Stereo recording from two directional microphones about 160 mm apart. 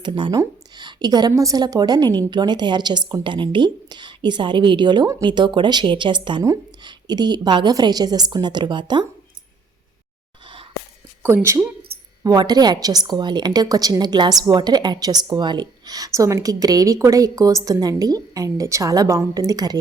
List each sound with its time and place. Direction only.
0.0 s a woman's voice: 30° right (ahead or behind)
10.4 s a sound: 30° right (ahead or behind)
11.4 s a woman's voice: 20° right (ahead or behind)